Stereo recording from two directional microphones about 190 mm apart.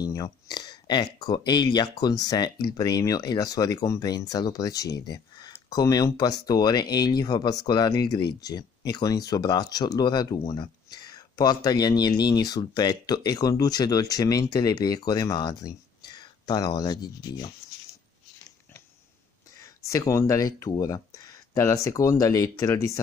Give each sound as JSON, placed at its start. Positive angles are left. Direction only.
{"t": 0.0, "sound": "speech", "side_deg": 20}
{"t": 19.6, "sound": "speech", "side_deg": 15}
{"t": 20.7, "sound": "a sound", "side_deg": 15}
{"t": 21.8, "sound": "speech", "side_deg": 15}